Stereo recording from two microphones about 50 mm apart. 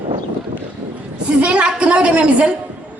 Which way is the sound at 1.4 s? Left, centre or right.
Right.